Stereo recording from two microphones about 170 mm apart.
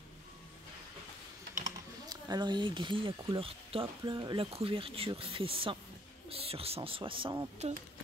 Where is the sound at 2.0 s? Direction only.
25° right (ahead or behind).